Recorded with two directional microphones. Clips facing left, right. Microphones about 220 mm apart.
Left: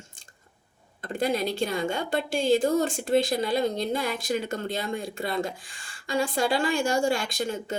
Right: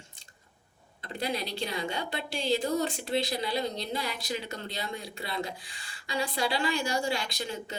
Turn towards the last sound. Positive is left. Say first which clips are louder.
# left 6 dB
turn(degrees=50)  # may be behind; listen again after turning